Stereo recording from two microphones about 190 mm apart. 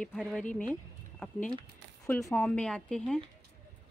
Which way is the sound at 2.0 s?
10° left (ahead or behind).